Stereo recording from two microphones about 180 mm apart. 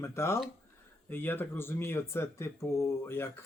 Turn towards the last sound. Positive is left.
turn(degrees=15)  # may be behind; listen again after turning